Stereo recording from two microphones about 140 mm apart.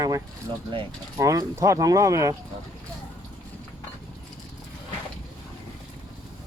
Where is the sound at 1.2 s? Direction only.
25° right (ahead or behind).